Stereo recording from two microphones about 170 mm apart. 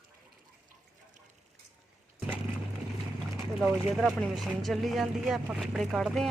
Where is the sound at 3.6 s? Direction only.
Centre (ahead or behind).